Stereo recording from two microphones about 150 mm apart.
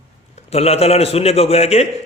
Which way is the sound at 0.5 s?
45° left (ahead or behind).